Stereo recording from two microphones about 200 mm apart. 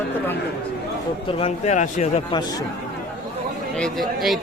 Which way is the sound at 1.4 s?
35° left (ahead or behind).